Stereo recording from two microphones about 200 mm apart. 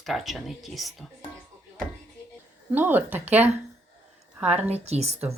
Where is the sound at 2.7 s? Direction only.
10° right (ahead or behind).